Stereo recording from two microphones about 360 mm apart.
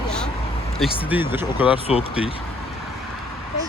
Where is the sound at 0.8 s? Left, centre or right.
Centre.